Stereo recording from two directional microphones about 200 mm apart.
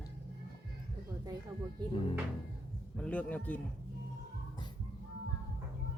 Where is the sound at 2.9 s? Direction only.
5° left (ahead or behind).